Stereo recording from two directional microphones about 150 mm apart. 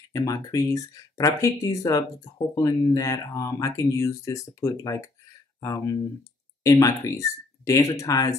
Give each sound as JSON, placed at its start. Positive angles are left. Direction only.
{"t": 0.1, "sound": "speech", "side_deg": 20}
{"t": 6.6, "sound": "speech", "side_deg": 20}